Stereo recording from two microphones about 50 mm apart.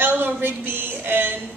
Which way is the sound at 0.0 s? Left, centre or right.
Right.